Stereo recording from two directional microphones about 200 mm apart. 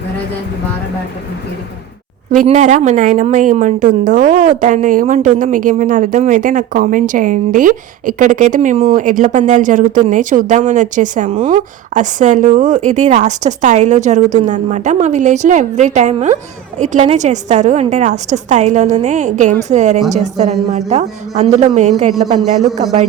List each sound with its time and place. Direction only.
2.3 s a woman's voice: 40° right (ahead or behind)